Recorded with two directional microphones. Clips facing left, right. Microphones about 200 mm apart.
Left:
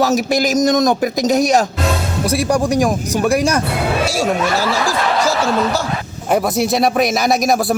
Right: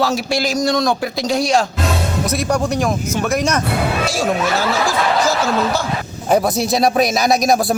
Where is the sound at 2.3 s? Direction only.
10° left (ahead or behind).